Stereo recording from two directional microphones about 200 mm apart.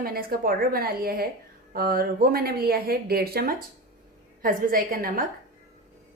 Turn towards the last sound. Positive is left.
turn(degrees=-45)  # may be behind; listen again after turning